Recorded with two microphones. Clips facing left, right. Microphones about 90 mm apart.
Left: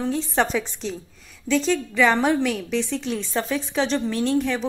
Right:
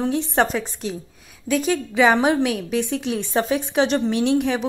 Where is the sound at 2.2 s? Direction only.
55° right (ahead or behind).